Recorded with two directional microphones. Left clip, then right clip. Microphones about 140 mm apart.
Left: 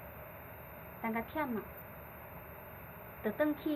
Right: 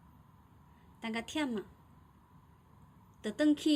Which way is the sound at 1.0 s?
90° right.